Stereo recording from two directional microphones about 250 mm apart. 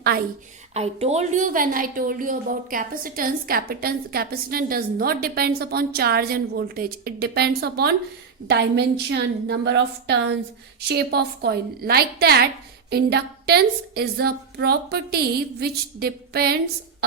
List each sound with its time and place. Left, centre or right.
0.0 s a woman's voice: right
0.7 s a woman's voice: right